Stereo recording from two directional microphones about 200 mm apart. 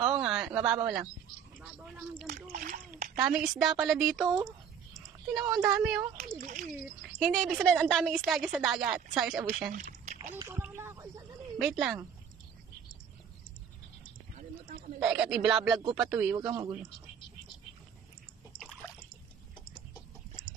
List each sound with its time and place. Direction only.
0.0 s a sound: centre (ahead or behind)
1.6 s speech: 5° right (ahead or behind)
2.6 s a child's voice: 35° right (ahead or behind)
3.2 s speech: centre (ahead or behind)
5.5 s speech: centre (ahead or behind)
6.4 s a child's voice: 40° right (ahead or behind)
6.8 s speech: centre (ahead or behind)
9.7 s a sound: 40° right (ahead or behind)
10.3 s a sound: 10° right (ahead or behind)
11.5 s speech: centre (ahead or behind)
15.0 s speech: 5° right (ahead or behind)
16.3 s speech: 20° right (ahead or behind)